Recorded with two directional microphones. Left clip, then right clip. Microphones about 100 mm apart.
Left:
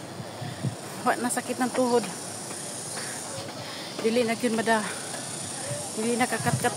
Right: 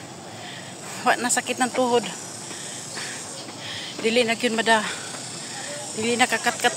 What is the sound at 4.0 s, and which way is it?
Speech, centre (ahead or behind).